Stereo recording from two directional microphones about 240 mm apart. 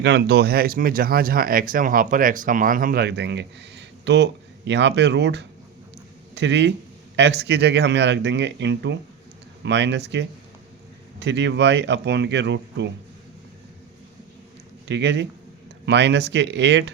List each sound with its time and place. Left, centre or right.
0.0 s speech: right
14.8 s speech: right